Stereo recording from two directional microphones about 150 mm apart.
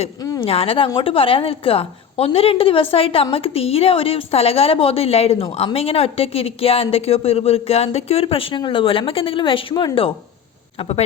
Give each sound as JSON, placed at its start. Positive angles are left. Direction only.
{"t": 0.4, "sound": "a woman's voice", "side_deg": 40}
{"t": 10.8, "sound": "speech", "side_deg": 45}